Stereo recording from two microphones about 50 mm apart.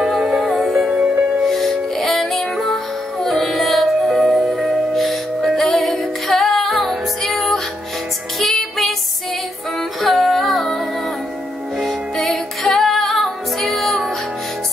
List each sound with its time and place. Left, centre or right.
0.2 s music: centre
0.8 s music: centre
1.4 s music: centre
10.0 s music: centre
11.8 s music: centre